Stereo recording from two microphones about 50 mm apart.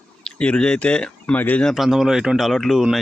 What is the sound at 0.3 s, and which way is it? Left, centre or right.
Speech, left.